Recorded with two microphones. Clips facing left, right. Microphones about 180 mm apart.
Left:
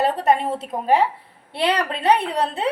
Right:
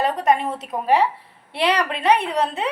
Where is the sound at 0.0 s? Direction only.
30° left (ahead or behind).